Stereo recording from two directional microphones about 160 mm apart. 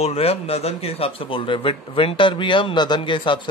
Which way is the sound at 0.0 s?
40° left (ahead or behind).